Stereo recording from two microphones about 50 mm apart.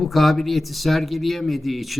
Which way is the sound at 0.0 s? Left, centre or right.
Centre.